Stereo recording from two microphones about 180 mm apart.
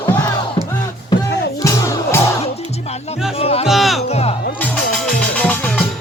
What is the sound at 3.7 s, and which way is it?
Music, centre (ahead or behind).